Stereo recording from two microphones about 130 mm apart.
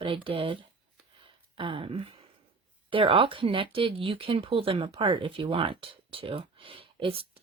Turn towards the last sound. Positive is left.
turn(degrees=-45)  # may be behind; listen again after turning